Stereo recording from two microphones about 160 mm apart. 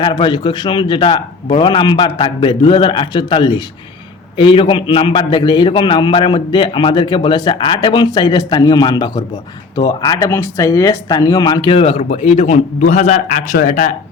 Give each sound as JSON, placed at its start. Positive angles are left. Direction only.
{"t": 0.0, "sound": "a man's voice", "side_deg": 30}